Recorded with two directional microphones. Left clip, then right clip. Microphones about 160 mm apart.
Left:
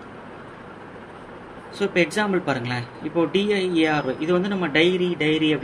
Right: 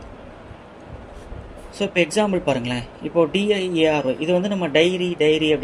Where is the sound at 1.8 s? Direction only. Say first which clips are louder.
Right 2 dB; 60° right (ahead or behind).